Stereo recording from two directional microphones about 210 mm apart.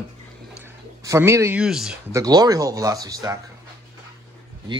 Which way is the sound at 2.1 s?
15° right (ahead or behind).